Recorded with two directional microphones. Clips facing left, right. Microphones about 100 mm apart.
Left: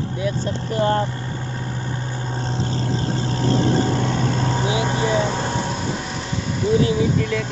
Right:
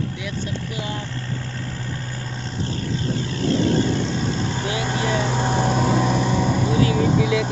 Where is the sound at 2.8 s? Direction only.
35° left (ahead or behind).